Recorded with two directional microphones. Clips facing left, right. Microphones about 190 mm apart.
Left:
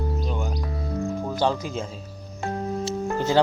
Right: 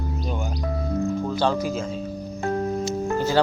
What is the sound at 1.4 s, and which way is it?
Speech, 15° left (ahead or behind).